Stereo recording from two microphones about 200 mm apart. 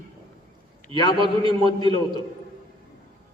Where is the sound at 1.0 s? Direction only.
20° left (ahead or behind).